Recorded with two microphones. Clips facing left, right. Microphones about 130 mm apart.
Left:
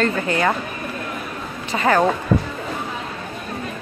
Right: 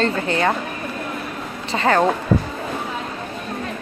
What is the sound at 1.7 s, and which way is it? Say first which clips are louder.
Speech: even; 30° right (ahead or behind).